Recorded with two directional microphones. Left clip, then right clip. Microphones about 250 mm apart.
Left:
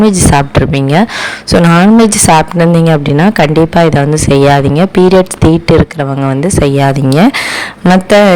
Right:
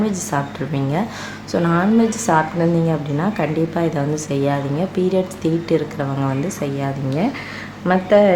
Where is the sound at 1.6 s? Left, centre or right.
Left.